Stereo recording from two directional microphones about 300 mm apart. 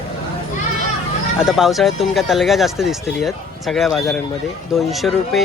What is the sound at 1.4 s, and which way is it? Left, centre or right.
Speech, centre.